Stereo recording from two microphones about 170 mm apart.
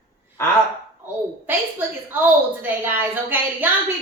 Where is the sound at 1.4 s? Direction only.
10° right (ahead or behind).